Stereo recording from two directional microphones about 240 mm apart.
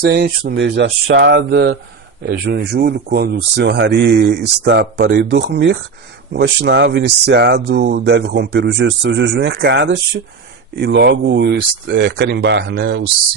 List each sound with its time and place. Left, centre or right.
0.0 s speech: right